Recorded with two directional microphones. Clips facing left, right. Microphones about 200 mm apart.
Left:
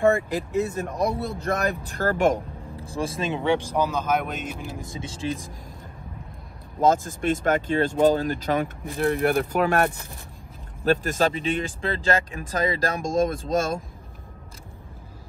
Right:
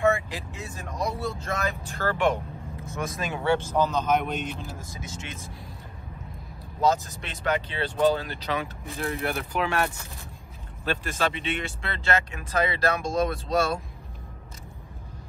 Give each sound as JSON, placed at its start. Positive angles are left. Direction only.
{"t": 0.0, "sound": "speech", "side_deg": 50}
{"t": 4.7, "sound": "speech", "side_deg": 30}
{"t": 6.8, "sound": "speech", "side_deg": 50}